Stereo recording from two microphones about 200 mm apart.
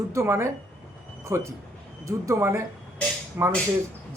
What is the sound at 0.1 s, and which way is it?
Speech, 15° right (ahead or behind).